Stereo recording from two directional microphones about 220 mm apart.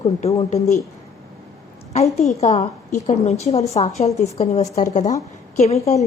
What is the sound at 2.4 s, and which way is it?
A woman's voice, 30° left (ahead or behind).